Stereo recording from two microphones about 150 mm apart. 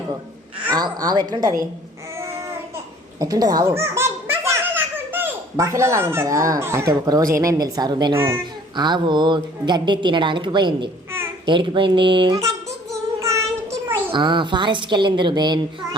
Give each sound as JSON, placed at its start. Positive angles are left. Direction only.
{"t": 0.7, "sound": "a woman's voice", "side_deg": -25}
{"t": 3.2, "sound": "a child's voice", "side_deg": -25}
{"t": 12.4, "sound": "child singing", "side_deg": -20}
{"t": 14.1, "sound": "speech", "side_deg": -30}